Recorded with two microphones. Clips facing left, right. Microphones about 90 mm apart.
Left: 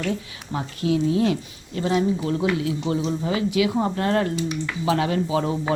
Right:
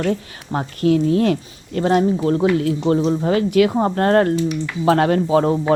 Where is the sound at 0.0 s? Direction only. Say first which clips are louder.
Right 6 dB; 50° right (ahead or behind).